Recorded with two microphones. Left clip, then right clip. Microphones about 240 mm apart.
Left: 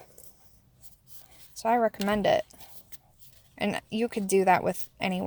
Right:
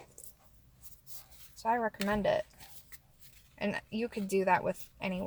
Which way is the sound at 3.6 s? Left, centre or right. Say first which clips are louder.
Left 6 dB; left.